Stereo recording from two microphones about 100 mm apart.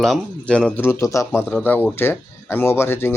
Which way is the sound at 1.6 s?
20° left (ahead or behind).